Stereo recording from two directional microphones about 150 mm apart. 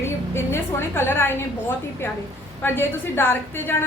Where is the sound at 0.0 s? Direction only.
15° left (ahead or behind).